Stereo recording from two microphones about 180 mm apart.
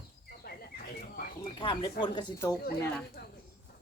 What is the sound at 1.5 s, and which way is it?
Speech, 25° left (ahead or behind).